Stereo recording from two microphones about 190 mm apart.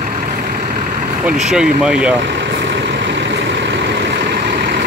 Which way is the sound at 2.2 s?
70° right (ahead or behind).